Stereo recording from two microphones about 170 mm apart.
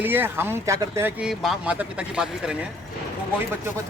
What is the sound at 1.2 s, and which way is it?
Speech, centre (ahead or behind).